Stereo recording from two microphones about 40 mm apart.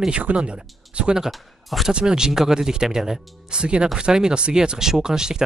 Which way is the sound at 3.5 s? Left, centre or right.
Right.